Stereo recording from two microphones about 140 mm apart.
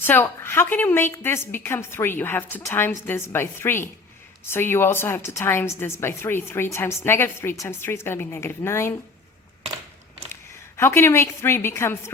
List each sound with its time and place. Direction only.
0.0 s a woman's voice: 15° left (ahead or behind)
10.8 s a woman's voice: 15° left (ahead or behind)